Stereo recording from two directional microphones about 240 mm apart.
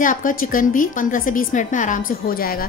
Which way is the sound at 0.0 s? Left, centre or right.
Left.